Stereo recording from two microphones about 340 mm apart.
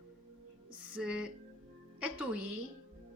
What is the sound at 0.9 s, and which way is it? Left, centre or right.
A woman's voice, centre.